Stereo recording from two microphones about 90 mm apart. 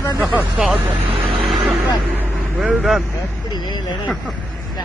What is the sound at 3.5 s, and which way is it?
Speech, 50° left (ahead or behind).